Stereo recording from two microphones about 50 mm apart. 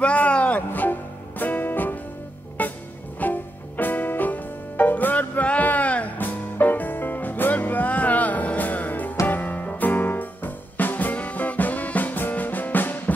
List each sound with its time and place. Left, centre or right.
0.0 s music: left